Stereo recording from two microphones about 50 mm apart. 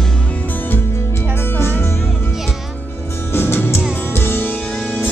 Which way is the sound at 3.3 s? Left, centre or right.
Left.